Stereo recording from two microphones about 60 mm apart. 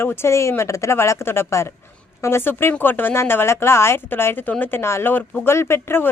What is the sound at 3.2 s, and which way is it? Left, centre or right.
A woman's voice, left.